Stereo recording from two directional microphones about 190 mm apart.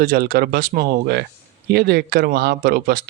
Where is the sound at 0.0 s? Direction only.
50° right (ahead or behind).